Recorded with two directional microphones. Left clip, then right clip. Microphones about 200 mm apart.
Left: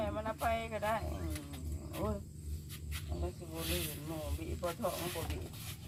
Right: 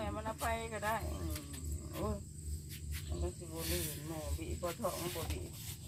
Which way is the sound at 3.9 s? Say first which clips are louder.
Left 2 dB; 10° left (ahead or behind).